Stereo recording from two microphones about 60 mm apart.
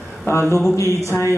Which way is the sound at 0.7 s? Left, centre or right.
Left.